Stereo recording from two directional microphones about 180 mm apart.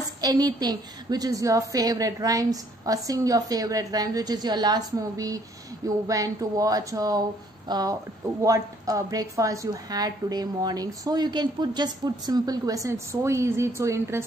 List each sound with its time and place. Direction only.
0.2 s speech: 20° right (ahead or behind)